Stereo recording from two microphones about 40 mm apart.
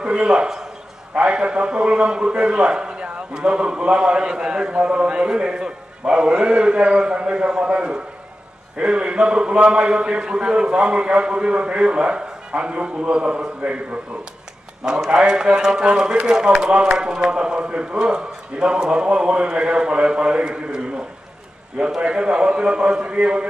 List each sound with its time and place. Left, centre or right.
0.0 s a man's voice: right
15.0 s a man's voice: right
22.0 s a man's voice: right